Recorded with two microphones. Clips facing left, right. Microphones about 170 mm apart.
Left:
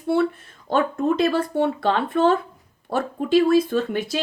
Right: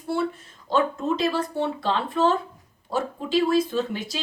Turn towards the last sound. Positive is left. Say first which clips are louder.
# left 4 dB
turn(degrees=55)  # may be behind; listen again after turning